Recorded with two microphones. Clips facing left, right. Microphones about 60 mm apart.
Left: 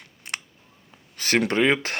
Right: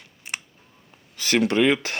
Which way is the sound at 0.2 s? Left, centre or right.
Left.